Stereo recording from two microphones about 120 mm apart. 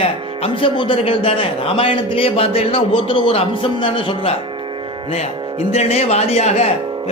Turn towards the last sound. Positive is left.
turn(degrees=60)  # may be behind; listen again after turning